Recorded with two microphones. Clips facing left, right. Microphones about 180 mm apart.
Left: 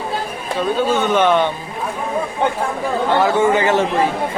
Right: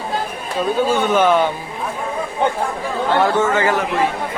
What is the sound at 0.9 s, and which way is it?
Speech, 10° right (ahead or behind).